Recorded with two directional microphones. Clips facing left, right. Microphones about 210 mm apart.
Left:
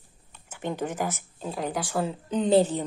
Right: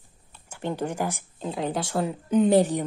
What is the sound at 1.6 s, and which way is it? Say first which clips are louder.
Speech: right 1 dB; 25° right (ahead or behind).